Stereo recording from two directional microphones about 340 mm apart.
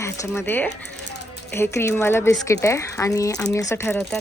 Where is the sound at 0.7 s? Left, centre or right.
Left.